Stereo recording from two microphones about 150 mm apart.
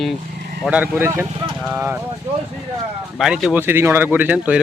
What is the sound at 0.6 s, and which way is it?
Speech, 10° right (ahead or behind).